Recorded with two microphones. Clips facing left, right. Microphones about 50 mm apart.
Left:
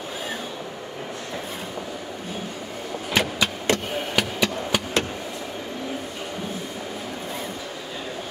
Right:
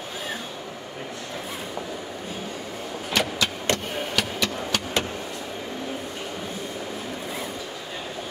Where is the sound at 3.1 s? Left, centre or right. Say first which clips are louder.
Left 2 dB; centre.